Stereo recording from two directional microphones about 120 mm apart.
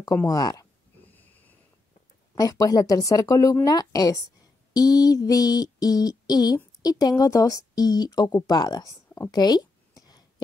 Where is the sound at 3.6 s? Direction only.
30° left (ahead or behind).